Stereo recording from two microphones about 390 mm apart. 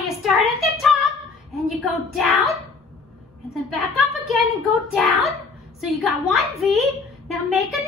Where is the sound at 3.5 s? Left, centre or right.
Centre.